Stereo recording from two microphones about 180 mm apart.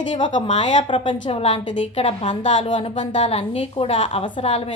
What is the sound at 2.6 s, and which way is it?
A woman's voice, 25° left (ahead or behind).